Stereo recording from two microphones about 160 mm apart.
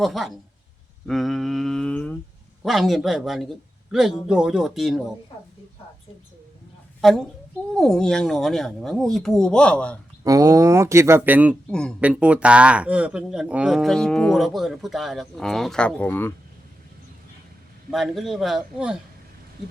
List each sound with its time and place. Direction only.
0.0 s speech: centre (ahead or behind)
7.0 s speech: centre (ahead or behind)
10.2 s speech: 20° right (ahead or behind)
11.7 s speech: 5° left (ahead or behind)
11.9 s speech: 10° right (ahead or behind); by 16.3 s 10° left (ahead or behind)
17.9 s speech: centre (ahead or behind)